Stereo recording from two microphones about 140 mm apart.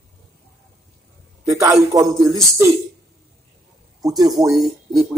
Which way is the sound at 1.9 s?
25° right (ahead or behind).